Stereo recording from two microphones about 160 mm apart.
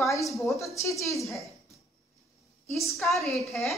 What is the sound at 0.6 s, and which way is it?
Speech, 20° left (ahead or behind).